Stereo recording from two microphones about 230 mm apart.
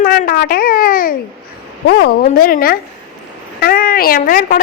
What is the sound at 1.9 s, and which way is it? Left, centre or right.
A woman's voice, left.